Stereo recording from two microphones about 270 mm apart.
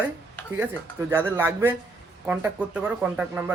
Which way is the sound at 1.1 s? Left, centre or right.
Centre.